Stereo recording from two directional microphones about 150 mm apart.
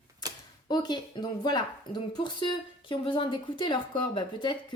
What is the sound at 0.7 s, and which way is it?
A woman's voice, 30° left (ahead or behind).